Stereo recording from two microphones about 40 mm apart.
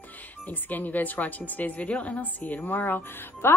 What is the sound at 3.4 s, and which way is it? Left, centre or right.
Speech, left.